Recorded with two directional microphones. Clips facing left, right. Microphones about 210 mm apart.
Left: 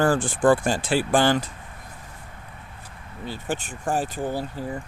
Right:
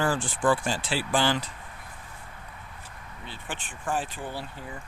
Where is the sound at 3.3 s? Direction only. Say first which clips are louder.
Left 10 dB; 45° left (ahead or behind).